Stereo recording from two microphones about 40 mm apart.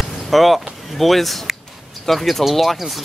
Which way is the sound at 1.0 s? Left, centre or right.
Centre.